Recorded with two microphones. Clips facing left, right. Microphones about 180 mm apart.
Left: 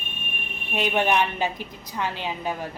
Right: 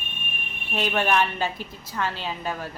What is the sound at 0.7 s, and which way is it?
A woman's voice, 15° left (ahead or behind).